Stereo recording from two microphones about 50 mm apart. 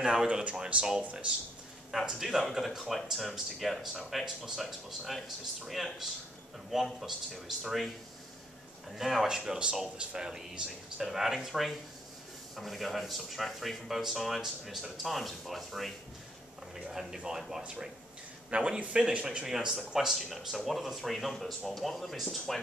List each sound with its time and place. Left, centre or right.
0.0 s speech: centre
0.4 s a man's voice: right
1.9 s speech: centre
6.7 s speech: centre
8.9 s speech: centre
17.1 s speech: centre
18.5 s a man's voice: right; by 22.6 s centre